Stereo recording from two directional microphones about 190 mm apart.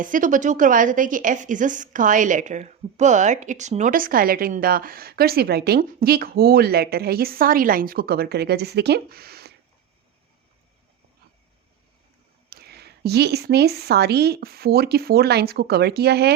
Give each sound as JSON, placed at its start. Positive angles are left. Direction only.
{"t": 0.0, "sound": "speech", "side_deg": -45}
{"t": 12.5, "sound": "speech", "side_deg": -55}